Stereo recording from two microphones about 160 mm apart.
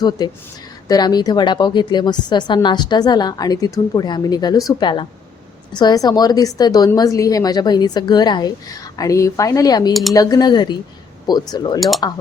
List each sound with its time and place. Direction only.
0.9 s a woman's voice: 25° left (ahead or behind)
9.9 s speech: centre (ahead or behind)
10.2 s a woman's voice: 25° left (ahead or behind)